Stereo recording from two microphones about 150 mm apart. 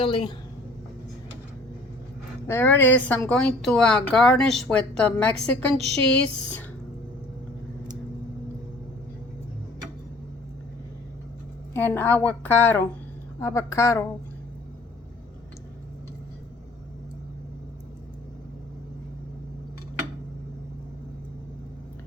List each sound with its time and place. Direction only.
0.0 s a woman's voice: 30° left (ahead or behind)
2.5 s a woman's voice: 15° left (ahead or behind)
11.7 s a woman's voice: 15° left (ahead or behind)